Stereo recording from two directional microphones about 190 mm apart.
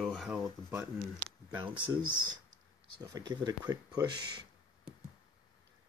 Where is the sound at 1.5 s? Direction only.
25° right (ahead or behind).